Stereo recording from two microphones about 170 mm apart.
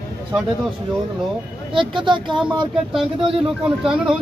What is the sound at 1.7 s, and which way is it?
Speech, 30° right (ahead or behind).